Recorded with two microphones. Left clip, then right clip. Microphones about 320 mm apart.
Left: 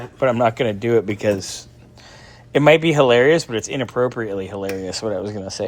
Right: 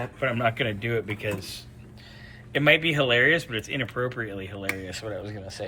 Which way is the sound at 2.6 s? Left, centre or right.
Centre.